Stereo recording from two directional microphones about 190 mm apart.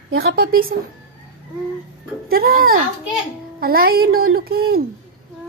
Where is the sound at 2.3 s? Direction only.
50° right (ahead or behind).